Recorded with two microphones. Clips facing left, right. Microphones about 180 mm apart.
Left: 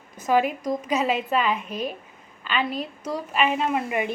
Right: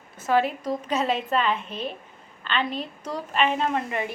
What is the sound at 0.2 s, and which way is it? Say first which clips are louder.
A woman's voice: left 1 dB; 15° left (ahead or behind).